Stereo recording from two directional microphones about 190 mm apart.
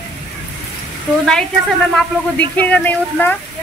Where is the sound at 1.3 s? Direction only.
5° left (ahead or behind).